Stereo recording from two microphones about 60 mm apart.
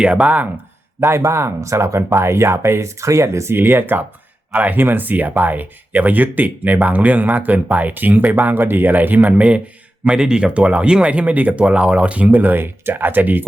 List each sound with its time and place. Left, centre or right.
0.0 s speech: right
0.9 s speech: right